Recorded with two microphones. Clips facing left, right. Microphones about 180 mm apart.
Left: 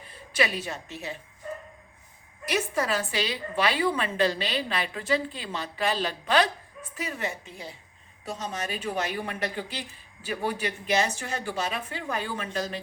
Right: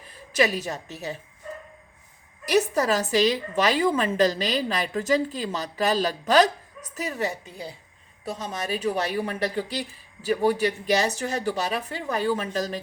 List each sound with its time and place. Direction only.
0.3 s a woman's voice: 40° right (ahead or behind)
2.5 s a woman's voice: 40° right (ahead or behind)